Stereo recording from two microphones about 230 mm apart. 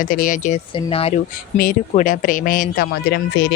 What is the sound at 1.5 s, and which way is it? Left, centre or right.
Speech, left.